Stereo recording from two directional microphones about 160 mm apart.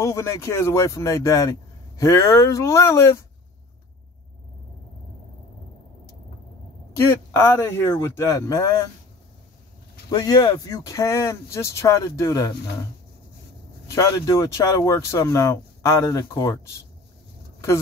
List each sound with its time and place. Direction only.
0.0 s speech: 20° left (ahead or behind)
7.3 s speech: 15° left (ahead or behind)
10.1 s speech: 25° left (ahead or behind)
13.9 s speech: 20° left (ahead or behind)